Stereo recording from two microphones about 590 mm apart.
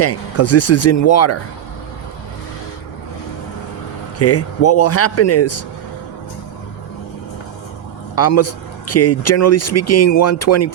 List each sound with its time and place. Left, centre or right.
0.0 s speech: left
4.2 s speech: left
8.1 s speech: left